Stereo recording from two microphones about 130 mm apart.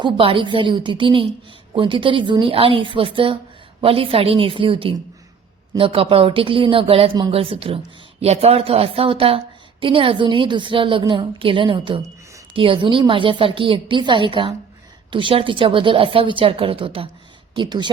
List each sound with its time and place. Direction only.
0.0 s a woman's voice: 40° right (ahead or behind)